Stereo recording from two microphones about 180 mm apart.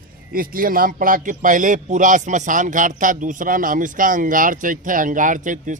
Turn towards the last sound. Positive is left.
turn(degrees=-45)  # may be behind; listen again after turning